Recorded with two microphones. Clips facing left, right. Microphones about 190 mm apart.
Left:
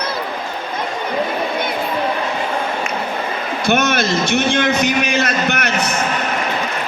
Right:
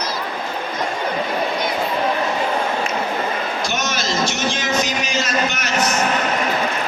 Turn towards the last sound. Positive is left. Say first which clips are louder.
# left 2 dB
turn(degrees=60)  # may be behind; listen again after turning